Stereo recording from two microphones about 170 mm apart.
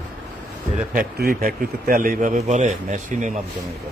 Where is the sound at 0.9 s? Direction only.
55° right (ahead or behind).